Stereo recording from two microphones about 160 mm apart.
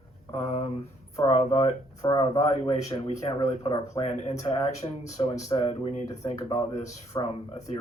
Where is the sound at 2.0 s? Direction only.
25° left (ahead or behind).